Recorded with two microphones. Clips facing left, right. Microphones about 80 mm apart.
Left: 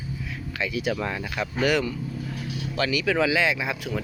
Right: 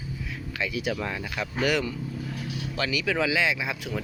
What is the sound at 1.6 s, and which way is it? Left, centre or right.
Speech, centre.